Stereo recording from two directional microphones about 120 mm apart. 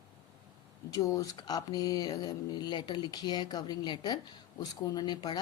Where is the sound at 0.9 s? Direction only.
30° left (ahead or behind).